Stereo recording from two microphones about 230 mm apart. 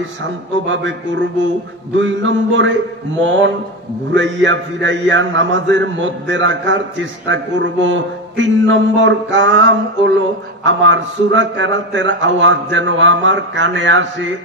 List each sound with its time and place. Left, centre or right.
0.2 s a man's voice: right
4.1 s a man's voice: right